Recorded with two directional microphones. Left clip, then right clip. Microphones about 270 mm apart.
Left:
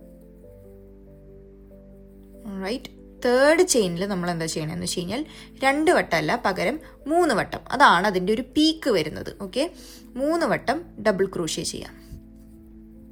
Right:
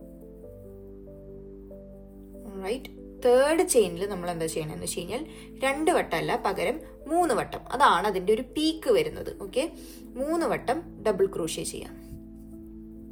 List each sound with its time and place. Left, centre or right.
2.4 s speech: left